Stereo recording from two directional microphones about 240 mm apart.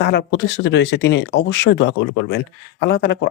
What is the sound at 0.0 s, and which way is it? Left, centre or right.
Speech, left.